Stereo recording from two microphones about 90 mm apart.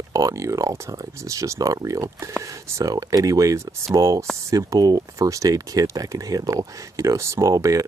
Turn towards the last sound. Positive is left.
turn(degrees=-40)  # may be behind; listen again after turning